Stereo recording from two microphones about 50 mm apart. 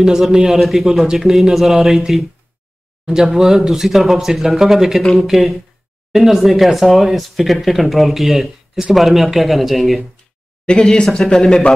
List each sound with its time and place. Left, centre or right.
0.0 s speech: centre
10.7 s speech: centre